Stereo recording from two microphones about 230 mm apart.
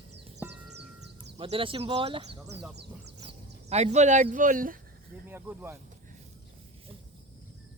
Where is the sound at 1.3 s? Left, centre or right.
Right.